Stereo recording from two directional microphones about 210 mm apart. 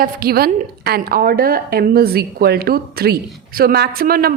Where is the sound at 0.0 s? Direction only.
45° right (ahead or behind).